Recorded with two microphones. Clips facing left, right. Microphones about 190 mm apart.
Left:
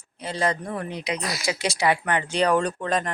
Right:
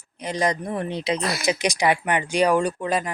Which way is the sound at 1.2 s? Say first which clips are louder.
Right 4 dB; 60° right (ahead or behind).